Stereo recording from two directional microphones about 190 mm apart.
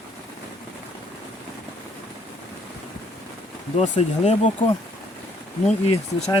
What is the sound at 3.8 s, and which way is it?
Speech, 35° left (ahead or behind).